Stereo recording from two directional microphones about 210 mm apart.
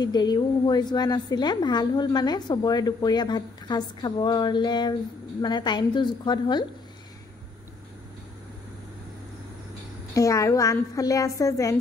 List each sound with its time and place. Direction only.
0.0 s a woman's voice: 20° left (ahead or behind)
10.1 s a woman's voice: 15° left (ahead or behind)